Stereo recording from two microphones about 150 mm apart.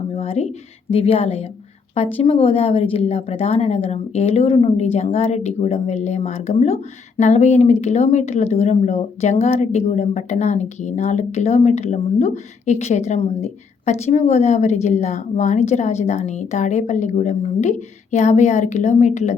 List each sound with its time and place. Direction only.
0.2 s a woman's voice: 45° left (ahead or behind)